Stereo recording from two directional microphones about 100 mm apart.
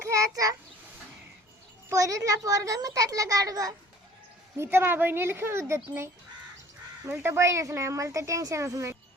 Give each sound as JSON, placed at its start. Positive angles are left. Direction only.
{"t": 0.1, "sound": "a sound", "side_deg": -35}
{"t": 1.9, "sound": "a child's voice", "side_deg": -35}
{"t": 4.5, "sound": "speech", "side_deg": -25}
{"t": 7.1, "sound": "speech", "side_deg": -25}